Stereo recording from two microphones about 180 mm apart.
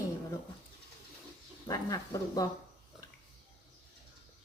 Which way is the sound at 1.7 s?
20° left (ahead or behind).